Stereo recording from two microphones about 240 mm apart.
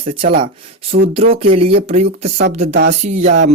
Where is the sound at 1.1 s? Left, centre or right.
Right.